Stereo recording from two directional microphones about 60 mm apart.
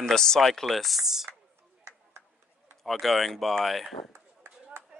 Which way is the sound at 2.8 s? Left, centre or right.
Centre.